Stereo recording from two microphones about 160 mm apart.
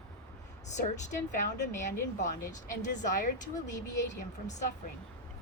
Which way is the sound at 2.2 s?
50° left (ahead or behind).